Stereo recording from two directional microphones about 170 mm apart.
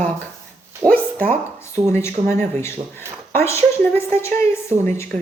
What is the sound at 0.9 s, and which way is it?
A woman's voice, 10° left (ahead or behind).